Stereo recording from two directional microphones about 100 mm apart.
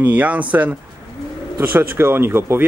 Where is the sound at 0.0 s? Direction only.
15° right (ahead or behind).